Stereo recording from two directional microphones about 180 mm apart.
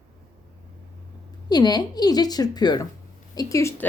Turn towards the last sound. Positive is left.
turn(degrees=15)  # may be behind; listen again after turning